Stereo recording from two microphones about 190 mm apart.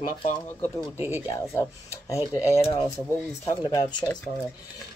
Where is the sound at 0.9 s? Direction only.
10° right (ahead or behind).